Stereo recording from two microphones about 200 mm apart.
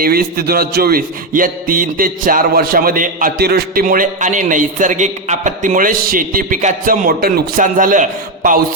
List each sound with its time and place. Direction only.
0.0 s a man's voice: 50° right (ahead or behind)